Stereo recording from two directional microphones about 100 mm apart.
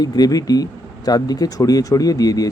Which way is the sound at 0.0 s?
40° left (ahead or behind).